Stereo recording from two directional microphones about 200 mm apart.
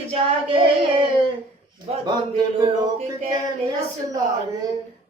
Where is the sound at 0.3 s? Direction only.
25° right (ahead or behind).